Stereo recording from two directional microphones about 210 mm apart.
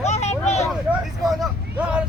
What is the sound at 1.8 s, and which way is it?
Speech, 5° right (ahead or behind).